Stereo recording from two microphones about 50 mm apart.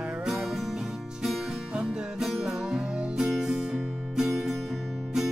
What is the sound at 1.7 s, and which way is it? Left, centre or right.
Music, centre.